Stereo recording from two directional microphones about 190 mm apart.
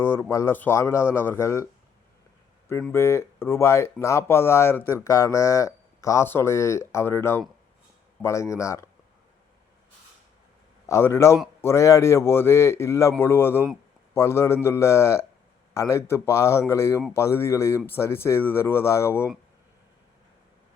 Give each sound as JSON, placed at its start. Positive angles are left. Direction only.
{"t": 0.0, "sound": "speech", "side_deg": 10}
{"t": 2.9, "sound": "speech", "side_deg": 15}
{"t": 10.8, "sound": "speech", "side_deg": 15}